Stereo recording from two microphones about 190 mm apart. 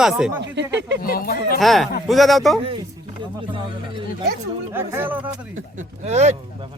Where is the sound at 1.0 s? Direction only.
50° left (ahead or behind).